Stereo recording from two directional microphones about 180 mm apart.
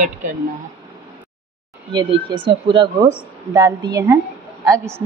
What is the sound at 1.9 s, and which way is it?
A woman's voice, 25° right (ahead or behind).